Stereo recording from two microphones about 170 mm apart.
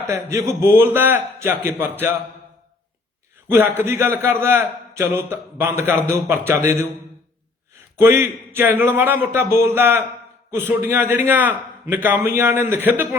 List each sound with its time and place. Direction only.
0.1 s a man's voice: 15° right (ahead or behind)
3.5 s a man's voice: 10° right (ahead or behind)
7.9 s a man's voice: 15° right (ahead or behind)